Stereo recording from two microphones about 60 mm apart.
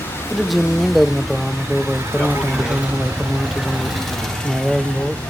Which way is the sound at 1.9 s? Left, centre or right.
Right.